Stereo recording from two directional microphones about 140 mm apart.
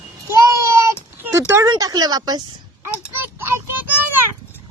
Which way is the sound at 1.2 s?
20° right (ahead or behind).